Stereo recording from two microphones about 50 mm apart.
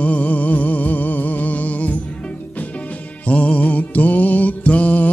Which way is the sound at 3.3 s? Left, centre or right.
Left.